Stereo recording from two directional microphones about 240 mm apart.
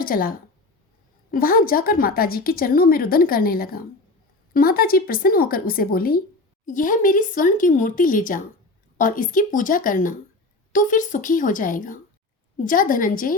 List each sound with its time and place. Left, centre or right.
0.0 s a woman's voice: left